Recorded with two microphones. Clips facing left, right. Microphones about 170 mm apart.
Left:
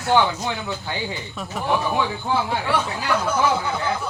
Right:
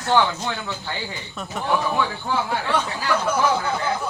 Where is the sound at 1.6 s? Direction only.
15° left (ahead or behind).